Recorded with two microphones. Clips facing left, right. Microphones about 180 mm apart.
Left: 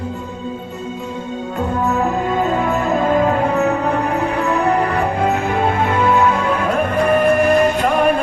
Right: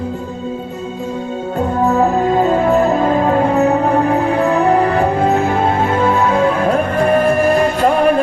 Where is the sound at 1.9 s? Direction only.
40° right (ahead or behind).